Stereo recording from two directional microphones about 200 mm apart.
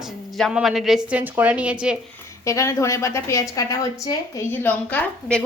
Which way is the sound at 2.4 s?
15° left (ahead or behind).